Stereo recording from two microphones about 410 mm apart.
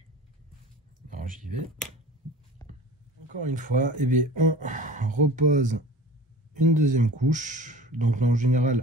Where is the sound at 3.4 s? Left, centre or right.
Centre.